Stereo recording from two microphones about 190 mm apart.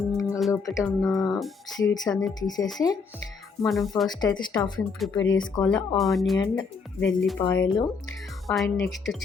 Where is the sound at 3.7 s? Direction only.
Centre (ahead or behind).